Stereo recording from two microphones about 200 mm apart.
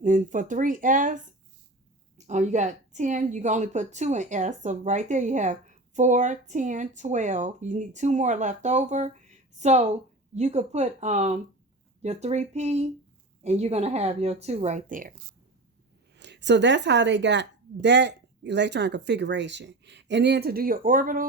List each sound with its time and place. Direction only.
0.0 s a woman's voice: 40° right (ahead or behind)
16.1 s a woman's voice: 60° right (ahead or behind); by 21.2 s 45° right (ahead or behind)